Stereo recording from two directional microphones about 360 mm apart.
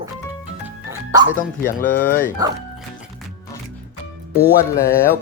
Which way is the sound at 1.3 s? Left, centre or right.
Left.